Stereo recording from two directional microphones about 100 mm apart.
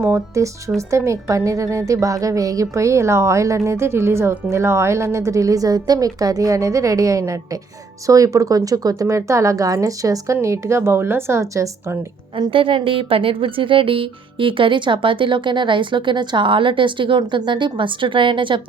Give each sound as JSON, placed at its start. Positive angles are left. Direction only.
{"t": 0.0, "sound": "a woman's voice", "side_deg": -25}
{"t": 12.4, "sound": "speech", "side_deg": -60}